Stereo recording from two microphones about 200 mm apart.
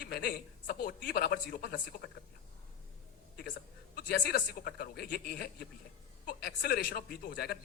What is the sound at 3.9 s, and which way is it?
A man's voice, 50° left (ahead or behind).